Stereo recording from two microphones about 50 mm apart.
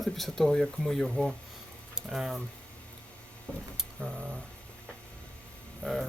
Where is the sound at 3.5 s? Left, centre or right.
Left.